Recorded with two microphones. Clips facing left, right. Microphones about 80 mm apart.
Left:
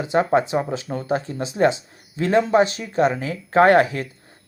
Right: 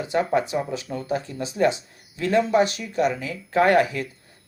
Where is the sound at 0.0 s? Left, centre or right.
Left.